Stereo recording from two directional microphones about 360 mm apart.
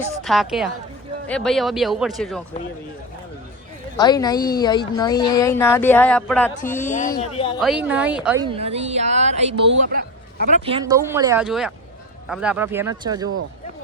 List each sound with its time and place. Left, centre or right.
0.3 s a man's voice: centre
3.9 s speech: centre
6.7 s speech: left
7.6 s a man's voice: centre
8.4 s speech: centre
9.0 s music: centre
9.6 s speech: right; by 13.3 s centre